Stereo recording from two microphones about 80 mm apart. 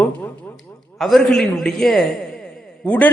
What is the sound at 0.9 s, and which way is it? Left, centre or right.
A man's voice, centre.